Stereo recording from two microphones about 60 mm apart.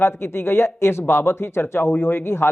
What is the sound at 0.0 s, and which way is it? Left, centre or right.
Speech, left.